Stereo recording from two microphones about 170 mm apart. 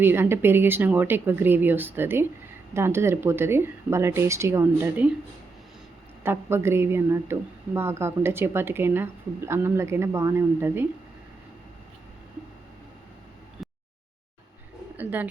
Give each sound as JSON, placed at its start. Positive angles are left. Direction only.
{"t": 0.0, "sound": "a woman's voice", "side_deg": -15}
{"t": 6.2, "sound": "a woman's voice", "side_deg": -15}
{"t": 14.9, "sound": "speech", "side_deg": -10}